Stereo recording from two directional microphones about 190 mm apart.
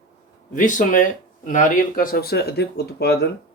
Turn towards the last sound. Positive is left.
turn(degrees=60)  # may be behind; listen again after turning